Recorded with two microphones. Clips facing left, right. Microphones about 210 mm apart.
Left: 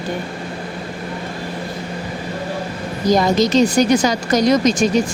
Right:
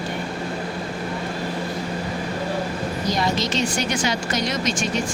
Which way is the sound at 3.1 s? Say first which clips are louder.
Left 11 dB; 40° left (ahead or behind).